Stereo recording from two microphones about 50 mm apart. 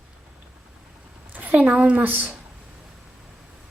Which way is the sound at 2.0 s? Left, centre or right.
Right.